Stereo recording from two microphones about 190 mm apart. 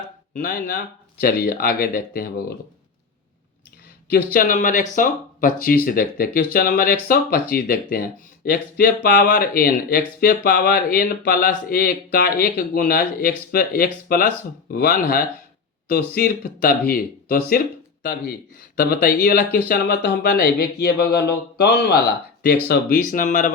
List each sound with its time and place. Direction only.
0.3 s speech: 50° left (ahead or behind)
4.1 s speech: 50° left (ahead or behind)